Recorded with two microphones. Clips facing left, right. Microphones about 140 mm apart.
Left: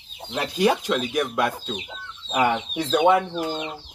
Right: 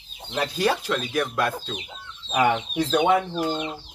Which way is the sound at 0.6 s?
15° left (ahead or behind).